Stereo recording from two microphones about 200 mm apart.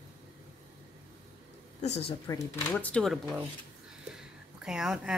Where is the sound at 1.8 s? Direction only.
30° left (ahead or behind).